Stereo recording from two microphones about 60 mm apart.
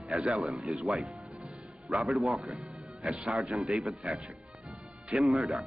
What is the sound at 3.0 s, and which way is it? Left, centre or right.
Speech, centre.